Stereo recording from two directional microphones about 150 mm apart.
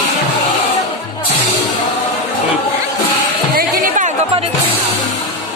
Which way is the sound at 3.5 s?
55° right (ahead or behind).